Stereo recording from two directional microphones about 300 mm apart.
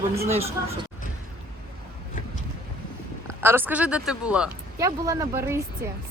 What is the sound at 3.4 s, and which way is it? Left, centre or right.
Speech, centre.